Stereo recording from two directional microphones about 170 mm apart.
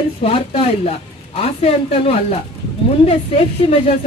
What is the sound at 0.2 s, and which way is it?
Speech, 35° left (ahead or behind).